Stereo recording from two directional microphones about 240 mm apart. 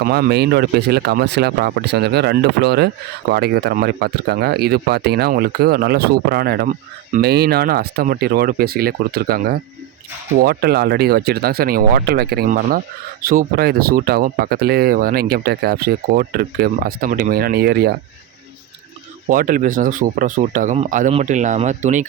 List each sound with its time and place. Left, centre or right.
0.0 s speech: right
19.3 s speech: right